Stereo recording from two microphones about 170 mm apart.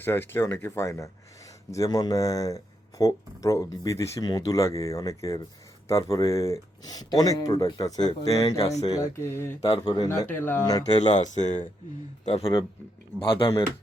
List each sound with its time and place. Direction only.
0.0 s speech: 10° left (ahead or behind)
11.1 s speech: 45° left (ahead or behind)